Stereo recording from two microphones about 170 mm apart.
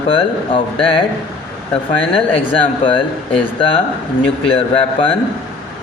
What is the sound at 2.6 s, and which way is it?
Speech, 30° left (ahead or behind).